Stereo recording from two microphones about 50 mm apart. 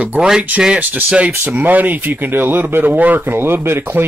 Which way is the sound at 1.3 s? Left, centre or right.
Right.